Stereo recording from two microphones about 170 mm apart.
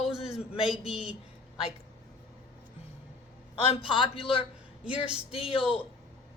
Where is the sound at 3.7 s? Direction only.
30° left (ahead or behind).